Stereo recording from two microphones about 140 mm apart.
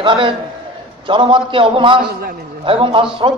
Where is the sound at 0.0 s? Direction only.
35° right (ahead or behind).